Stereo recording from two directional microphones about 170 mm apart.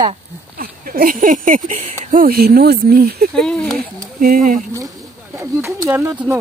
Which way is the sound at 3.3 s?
5° left (ahead or behind).